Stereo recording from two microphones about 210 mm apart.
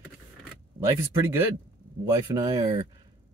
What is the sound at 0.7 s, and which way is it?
Speech, 15° right (ahead or behind).